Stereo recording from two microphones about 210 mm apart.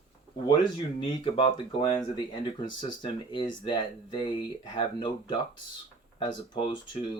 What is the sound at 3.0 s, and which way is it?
Speech, 25° left (ahead or behind).